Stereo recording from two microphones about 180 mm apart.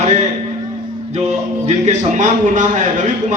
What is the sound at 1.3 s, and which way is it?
A man's voice, 40° right (ahead or behind).